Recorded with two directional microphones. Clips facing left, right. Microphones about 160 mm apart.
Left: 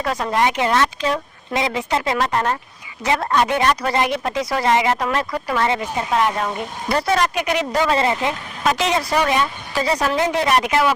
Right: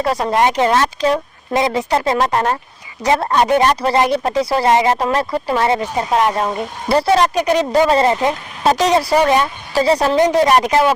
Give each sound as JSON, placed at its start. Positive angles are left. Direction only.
{"t": 0.0, "sound": "speech", "side_deg": -35}